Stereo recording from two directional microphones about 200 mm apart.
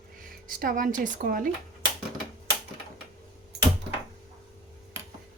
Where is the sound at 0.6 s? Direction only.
45° right (ahead or behind).